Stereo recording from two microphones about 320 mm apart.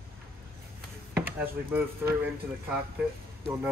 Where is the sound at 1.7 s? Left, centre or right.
Centre.